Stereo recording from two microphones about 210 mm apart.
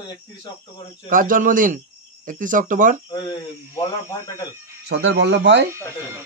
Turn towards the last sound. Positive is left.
turn(degrees=-55)  # may be behind; listen again after turning